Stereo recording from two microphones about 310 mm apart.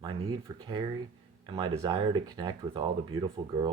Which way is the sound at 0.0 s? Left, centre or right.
Centre.